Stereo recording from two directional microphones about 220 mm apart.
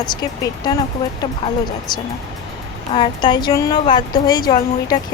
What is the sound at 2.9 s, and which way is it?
Speech, 20° left (ahead or behind).